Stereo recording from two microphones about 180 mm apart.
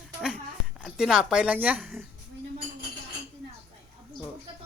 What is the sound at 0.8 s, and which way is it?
Speech, 5° right (ahead or behind).